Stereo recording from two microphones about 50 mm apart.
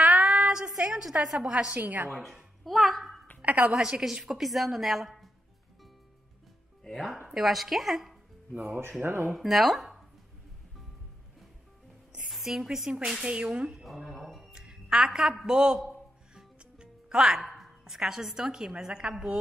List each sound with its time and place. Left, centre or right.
0.2 s a sound: centre
1.4 s a woman's voice: centre
1.7 s a woman's voice: right
2.6 s a woman's voice: centre
3.6 s a woman's voice: centre
7.2 s a woman's voice: centre
8.5 s a woman's voice: right
9.0 s speech: right
9.3 s a woman's voice: centre
12.3 s a woman's voice: centre
13.8 s speech: centre
14.5 s a man's voice: centre
16.3 s music: centre
17.6 s a woman's voice: centre